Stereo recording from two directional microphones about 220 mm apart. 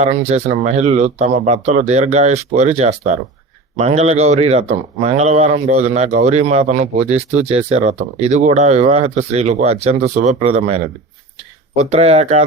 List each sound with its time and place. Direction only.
0.0 s a man's voice: 30° right (ahead or behind)
11.8 s a man's voice: 30° right (ahead or behind)